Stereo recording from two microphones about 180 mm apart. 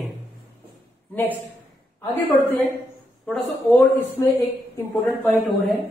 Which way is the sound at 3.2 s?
5° left (ahead or behind).